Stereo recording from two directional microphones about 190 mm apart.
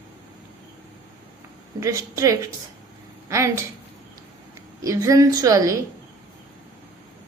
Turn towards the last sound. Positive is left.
turn(degrees=-15)  # may be behind; listen again after turning